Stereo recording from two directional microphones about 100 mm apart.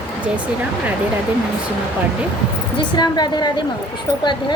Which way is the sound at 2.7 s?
45° left (ahead or behind).